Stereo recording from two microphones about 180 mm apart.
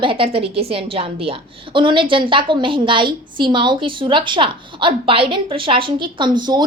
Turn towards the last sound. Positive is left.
turn(degrees=-25)  # may be behind; listen again after turning